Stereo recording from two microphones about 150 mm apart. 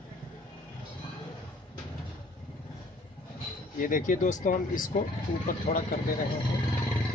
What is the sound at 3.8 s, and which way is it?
Speech, 60° left (ahead or behind).